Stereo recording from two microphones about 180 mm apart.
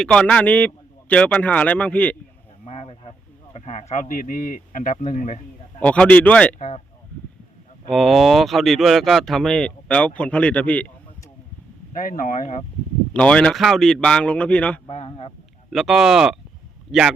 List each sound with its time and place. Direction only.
0.0 s speech: 5° left (ahead or behind)
2.6 s a man's voice: 35° left (ahead or behind)
5.8 s speech: 5° left (ahead or behind)
6.6 s speech: 40° left (ahead or behind)
7.9 s speech: centre (ahead or behind)
11.9 s speech: 50° left (ahead or behind)
13.1 s speech: 5° left (ahead or behind)
14.8 s speech: 35° left (ahead or behind)
15.7 s speech: centre (ahead or behind)